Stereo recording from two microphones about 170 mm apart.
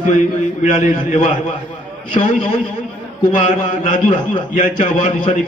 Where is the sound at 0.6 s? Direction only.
45° left (ahead or behind).